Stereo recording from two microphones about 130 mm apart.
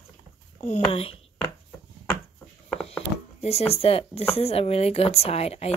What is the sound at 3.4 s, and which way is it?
Speech, 55° left (ahead or behind).